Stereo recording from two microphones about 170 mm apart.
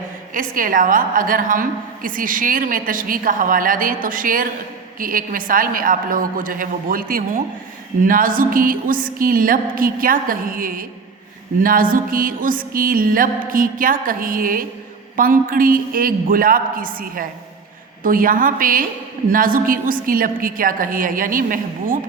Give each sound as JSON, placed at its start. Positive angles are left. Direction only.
{"t": 0.3, "sound": "a woman's voice", "side_deg": -55}
{"t": 4.9, "sound": "music", "side_deg": -55}